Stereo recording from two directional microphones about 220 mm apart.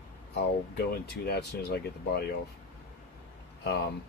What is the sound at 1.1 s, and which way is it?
Speech, 45° left (ahead or behind).